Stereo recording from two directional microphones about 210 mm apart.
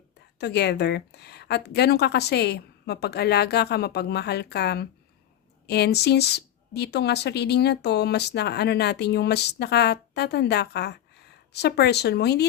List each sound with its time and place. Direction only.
0.3 s speech: 55° left (ahead or behind)